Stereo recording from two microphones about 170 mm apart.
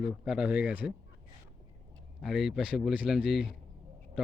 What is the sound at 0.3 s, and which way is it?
Speech, 5° right (ahead or behind).